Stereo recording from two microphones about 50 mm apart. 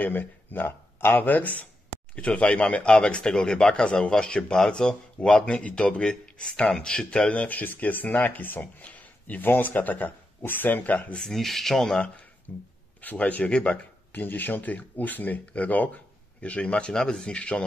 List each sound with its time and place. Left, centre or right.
0.0 s speech: left
8.8 s a sound: left
9.5 s speech: left
11.1 s speech: centre
12.5 s speech: left